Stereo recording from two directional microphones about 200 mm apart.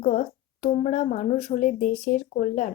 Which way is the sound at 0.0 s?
35° left (ahead or behind).